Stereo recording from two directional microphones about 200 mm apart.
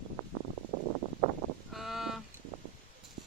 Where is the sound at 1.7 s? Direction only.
Centre (ahead or behind).